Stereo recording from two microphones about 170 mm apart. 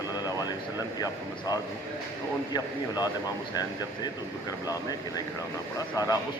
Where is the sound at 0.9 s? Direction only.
20° left (ahead or behind).